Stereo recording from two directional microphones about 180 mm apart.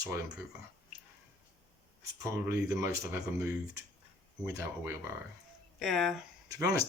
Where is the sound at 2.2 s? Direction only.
15° right (ahead or behind).